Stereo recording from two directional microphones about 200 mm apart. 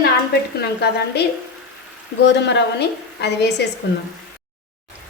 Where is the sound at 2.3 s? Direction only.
60° left (ahead or behind).